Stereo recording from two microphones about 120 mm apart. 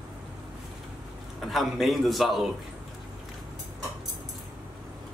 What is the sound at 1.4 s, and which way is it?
A man's voice, centre (ahead or behind).